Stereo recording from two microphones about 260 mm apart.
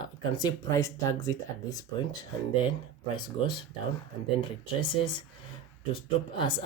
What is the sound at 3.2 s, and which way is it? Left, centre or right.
Speech, centre.